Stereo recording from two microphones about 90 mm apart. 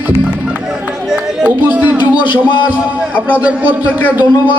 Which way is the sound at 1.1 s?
15° right (ahead or behind).